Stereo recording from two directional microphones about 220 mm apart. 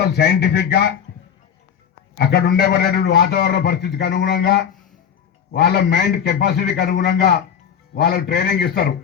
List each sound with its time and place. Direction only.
0.0 s a man's voice: 50° left (ahead or behind)
2.1 s a man's voice: 50° left (ahead or behind)